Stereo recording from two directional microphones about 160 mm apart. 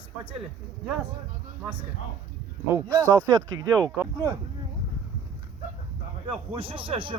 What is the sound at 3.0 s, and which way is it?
Speech, 10° left (ahead or behind).